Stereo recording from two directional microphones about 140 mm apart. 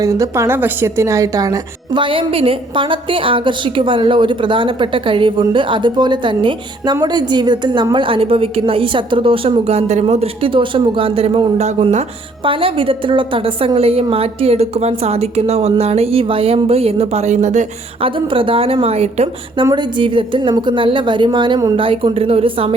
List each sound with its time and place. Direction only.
0.0 s a woman's voice: 20° right (ahead or behind); by 12.0 s 55° right (ahead or behind)
12.5 s a woman's voice: 40° right (ahead or behind); by 17.7 s 60° right (ahead or behind)
18.0 s a woman's voice: 40° right (ahead or behind)
19.7 s a woman's voice: 35° right (ahead or behind)